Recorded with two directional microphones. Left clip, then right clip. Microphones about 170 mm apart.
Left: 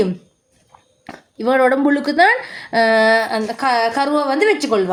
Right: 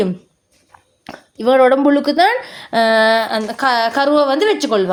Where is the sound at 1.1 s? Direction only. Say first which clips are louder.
Right 2 dB; 40° right (ahead or behind).